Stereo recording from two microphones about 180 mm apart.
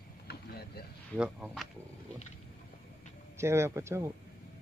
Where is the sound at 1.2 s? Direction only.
5° right (ahead or behind).